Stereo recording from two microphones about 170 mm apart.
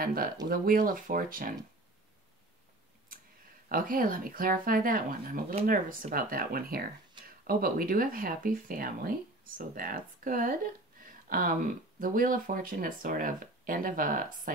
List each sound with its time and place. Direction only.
0.0 s speech: 60° right (ahead or behind)
3.6 s speech: 55° right (ahead or behind)